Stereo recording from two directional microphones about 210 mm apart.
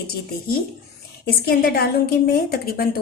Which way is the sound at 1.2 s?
45° left (ahead or behind).